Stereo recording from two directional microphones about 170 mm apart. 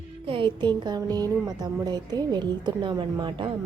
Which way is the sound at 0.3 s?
30° right (ahead or behind).